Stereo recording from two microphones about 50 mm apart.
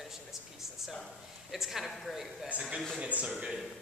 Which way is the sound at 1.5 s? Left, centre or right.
Centre.